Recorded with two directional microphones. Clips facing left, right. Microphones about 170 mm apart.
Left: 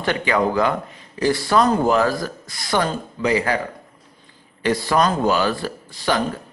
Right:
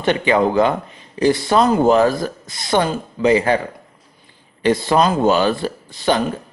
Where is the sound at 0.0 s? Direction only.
20° right (ahead or behind).